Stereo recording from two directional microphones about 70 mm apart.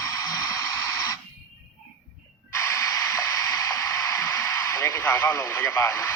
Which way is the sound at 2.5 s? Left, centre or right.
Left.